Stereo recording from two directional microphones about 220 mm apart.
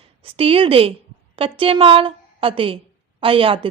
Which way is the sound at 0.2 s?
25° right (ahead or behind).